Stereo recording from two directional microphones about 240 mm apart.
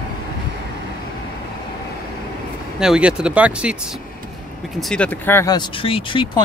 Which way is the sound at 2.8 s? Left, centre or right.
Centre.